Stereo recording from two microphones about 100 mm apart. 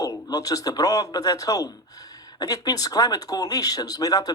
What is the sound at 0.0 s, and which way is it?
Speech, 40° left (ahead or behind).